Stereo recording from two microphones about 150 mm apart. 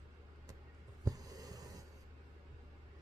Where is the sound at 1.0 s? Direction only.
25° right (ahead or behind).